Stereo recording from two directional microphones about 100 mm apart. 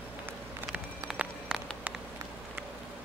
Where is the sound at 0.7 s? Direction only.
5° right (ahead or behind).